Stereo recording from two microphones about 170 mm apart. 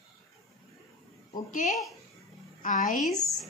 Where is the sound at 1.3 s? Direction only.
50° left (ahead or behind).